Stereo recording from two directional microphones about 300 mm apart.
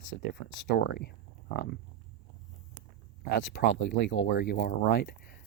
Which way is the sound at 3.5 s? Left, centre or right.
Left.